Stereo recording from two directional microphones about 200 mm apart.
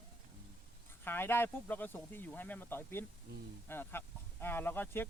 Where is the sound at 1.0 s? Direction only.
10° left (ahead or behind).